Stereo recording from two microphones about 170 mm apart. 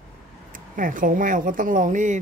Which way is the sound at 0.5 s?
50° right (ahead or behind).